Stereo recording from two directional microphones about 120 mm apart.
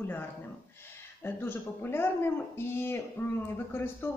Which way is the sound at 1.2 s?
20° left (ahead or behind).